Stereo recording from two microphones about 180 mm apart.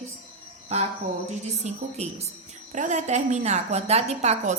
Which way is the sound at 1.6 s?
35° right (ahead or behind).